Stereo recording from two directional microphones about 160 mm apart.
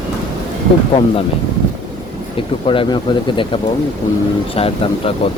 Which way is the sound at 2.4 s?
35° left (ahead or behind).